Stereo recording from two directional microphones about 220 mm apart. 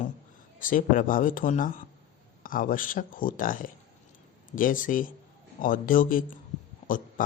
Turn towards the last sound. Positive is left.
turn(degrees=40)  # may be behind; listen again after turning